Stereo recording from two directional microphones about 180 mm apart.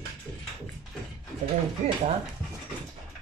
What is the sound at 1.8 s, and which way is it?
Stir, 40° right (ahead or behind).